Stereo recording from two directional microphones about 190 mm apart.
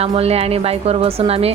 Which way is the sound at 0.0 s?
30° right (ahead or behind).